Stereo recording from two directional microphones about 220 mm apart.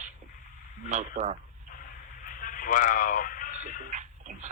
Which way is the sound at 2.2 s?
40° left (ahead or behind).